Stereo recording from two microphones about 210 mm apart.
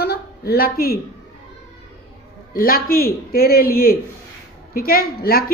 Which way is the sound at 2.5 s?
45° left (ahead or behind).